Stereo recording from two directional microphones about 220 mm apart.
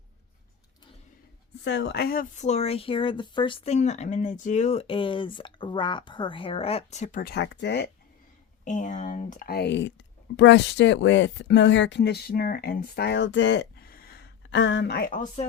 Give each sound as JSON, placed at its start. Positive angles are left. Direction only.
{"t": 1.6, "sound": "speech", "side_deg": 55}
{"t": 8.6, "sound": "speech", "side_deg": 35}